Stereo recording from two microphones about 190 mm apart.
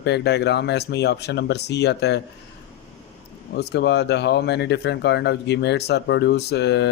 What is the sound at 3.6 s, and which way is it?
Speech, 60° left (ahead or behind).